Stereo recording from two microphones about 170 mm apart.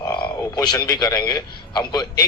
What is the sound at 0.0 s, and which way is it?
A man's voice, 20° left (ahead or behind).